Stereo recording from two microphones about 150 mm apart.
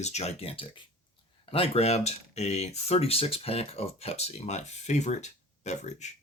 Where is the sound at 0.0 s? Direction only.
50° left (ahead or behind).